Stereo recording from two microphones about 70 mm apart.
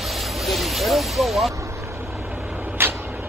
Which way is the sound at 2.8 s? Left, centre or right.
Right.